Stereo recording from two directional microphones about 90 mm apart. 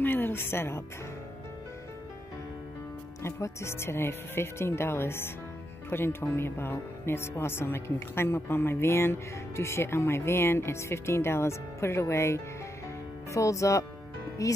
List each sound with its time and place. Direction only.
0.0 s a woman's voice: 25° left (ahead or behind)
3.2 s speech: 30° left (ahead or behind)